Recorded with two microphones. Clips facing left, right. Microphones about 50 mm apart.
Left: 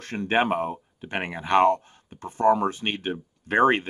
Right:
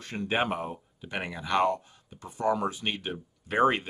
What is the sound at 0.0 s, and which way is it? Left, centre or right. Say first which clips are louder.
Speech: left 5 dB; left.